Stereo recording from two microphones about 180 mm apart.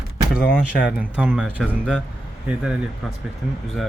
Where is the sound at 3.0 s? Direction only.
Centre (ahead or behind).